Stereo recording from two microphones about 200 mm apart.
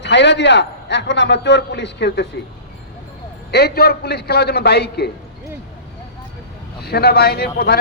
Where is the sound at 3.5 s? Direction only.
55° left (ahead or behind).